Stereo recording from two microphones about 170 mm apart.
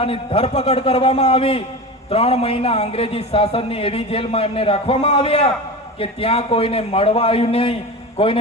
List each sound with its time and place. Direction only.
0.0 s a man's voice: 35° left (ahead or behind)